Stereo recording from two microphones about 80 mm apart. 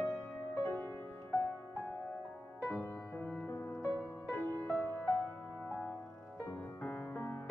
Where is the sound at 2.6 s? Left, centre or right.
Left.